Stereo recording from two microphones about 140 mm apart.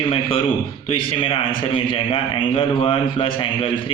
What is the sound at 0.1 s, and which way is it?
A man's voice, 40° left (ahead or behind).